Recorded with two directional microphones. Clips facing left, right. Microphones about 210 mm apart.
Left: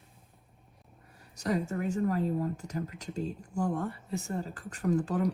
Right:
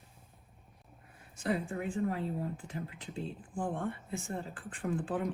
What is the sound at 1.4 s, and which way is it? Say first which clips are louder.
Speech: left 3 dB; 40° left (ahead or behind).